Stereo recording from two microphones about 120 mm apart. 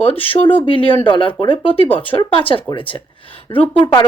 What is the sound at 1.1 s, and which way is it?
Speech, 45° left (ahead or behind).